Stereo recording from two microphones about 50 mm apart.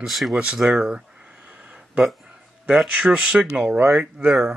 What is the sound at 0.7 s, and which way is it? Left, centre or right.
Speech, centre.